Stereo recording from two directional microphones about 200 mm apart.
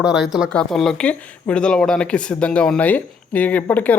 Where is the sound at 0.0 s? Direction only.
5° right (ahead or behind).